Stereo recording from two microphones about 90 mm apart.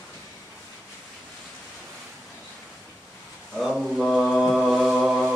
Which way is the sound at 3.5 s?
Centre (ahead or behind).